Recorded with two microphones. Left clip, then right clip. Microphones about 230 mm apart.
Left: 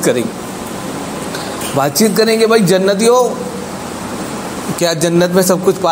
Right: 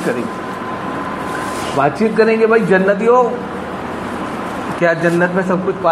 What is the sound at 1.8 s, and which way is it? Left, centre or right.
A man's voice, left.